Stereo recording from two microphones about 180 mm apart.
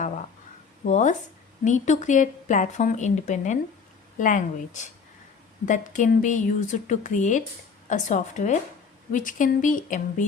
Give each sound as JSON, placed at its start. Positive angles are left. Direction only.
{"t": 0.9, "sound": "speech", "side_deg": 40}